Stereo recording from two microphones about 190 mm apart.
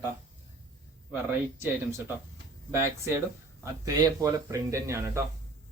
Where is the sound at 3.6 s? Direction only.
15° right (ahead or behind).